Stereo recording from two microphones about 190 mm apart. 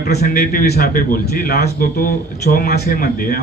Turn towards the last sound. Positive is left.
turn(degrees=50)  # may be behind; listen again after turning